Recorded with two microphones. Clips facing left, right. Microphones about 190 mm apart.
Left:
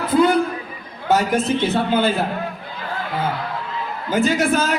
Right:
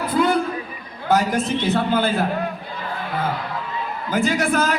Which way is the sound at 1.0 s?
25° left (ahead or behind).